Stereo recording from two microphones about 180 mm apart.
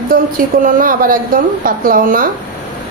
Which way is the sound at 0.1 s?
50° right (ahead or behind).